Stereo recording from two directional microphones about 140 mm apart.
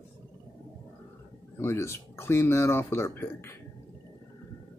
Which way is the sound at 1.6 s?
20° left (ahead or behind).